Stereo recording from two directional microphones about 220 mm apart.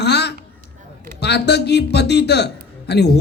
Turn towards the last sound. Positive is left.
turn(degrees=50)  # may be behind; listen again after turning